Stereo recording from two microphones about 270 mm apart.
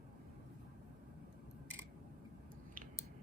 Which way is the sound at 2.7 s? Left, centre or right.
Right.